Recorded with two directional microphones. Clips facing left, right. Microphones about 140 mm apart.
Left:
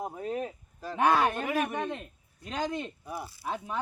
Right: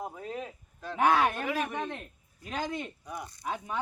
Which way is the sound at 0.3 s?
45° left (ahead or behind).